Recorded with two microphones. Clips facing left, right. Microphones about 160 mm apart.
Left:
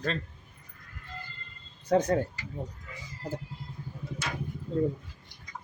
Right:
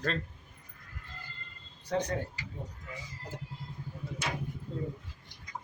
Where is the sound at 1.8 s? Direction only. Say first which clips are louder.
Left 7 dB; 45° left (ahead or behind).